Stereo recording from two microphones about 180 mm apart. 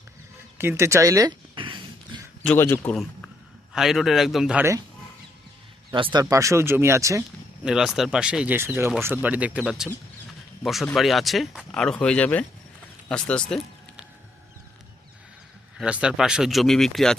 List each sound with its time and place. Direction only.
0.6 s speech: 15° right (ahead or behind)
2.4 s a man's voice: 10° left (ahead or behind)
5.9 s speech: 25° right (ahead or behind)
7.6 s speech: 5° right (ahead or behind)
15.8 s speech: 5° right (ahead or behind)